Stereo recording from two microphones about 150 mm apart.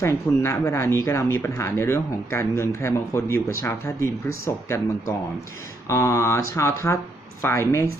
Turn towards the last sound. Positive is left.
turn(degrees=20)  # may be behind; listen again after turning